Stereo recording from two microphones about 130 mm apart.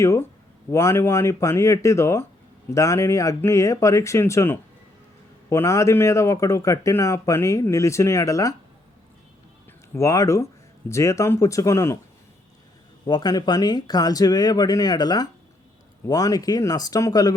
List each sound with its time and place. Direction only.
0.0 s speech: 25° left (ahead or behind)
9.9 s speech: 25° left (ahead or behind)
13.1 s speech: 30° left (ahead or behind)